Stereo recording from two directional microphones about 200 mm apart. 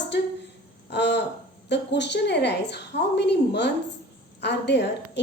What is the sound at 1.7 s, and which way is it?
A woman's voice, 60° left (ahead or behind).